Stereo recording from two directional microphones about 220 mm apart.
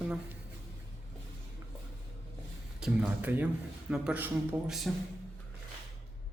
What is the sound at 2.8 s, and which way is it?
Speech, 5° right (ahead or behind).